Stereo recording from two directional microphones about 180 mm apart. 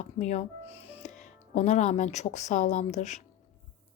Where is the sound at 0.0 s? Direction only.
40° left (ahead or behind).